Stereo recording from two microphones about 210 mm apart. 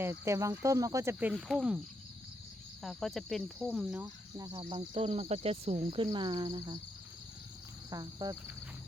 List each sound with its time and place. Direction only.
0.0 s speech: 15° right (ahead or behind)
1.3 s speech: centre (ahead or behind)
2.8 s speech: centre (ahead or behind)
4.0 s speech: 15° right (ahead or behind)
7.9 s speech: 20° right (ahead or behind)